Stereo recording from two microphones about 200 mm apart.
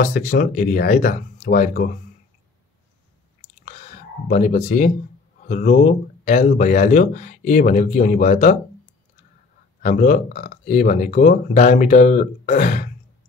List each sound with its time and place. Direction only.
0.0 s speech: 45° left (ahead or behind)
3.6 s a sound: 40° left (ahead or behind)
5.4 s speech: 40° left (ahead or behind)
9.8 s speech: 40° left (ahead or behind)